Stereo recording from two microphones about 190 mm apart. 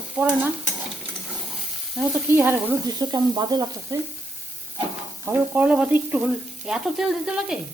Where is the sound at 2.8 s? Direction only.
20° right (ahead or behind).